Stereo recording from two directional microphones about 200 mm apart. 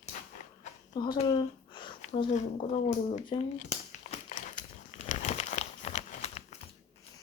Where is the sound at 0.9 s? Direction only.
20° left (ahead or behind).